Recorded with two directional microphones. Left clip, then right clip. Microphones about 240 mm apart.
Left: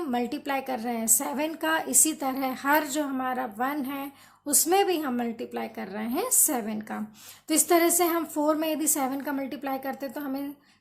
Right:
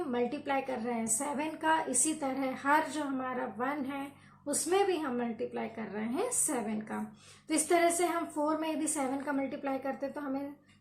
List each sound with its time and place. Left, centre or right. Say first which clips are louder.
0.1 s a woman's voice: left 3 dB; left